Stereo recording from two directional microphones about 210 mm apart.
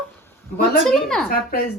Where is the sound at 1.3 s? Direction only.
45° left (ahead or behind).